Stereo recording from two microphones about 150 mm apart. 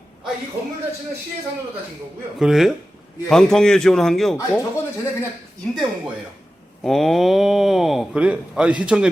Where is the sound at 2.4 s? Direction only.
5° right (ahead or behind).